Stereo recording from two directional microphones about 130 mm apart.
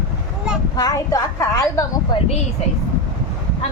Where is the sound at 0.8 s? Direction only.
25° left (ahead or behind).